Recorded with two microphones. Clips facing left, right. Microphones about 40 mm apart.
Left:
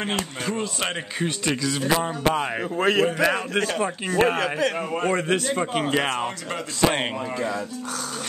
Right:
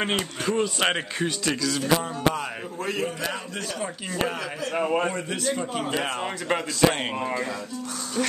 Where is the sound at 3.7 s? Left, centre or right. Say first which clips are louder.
Left 6 dB; left.